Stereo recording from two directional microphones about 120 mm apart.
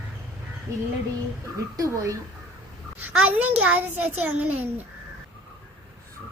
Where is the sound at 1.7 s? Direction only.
30° right (ahead or behind).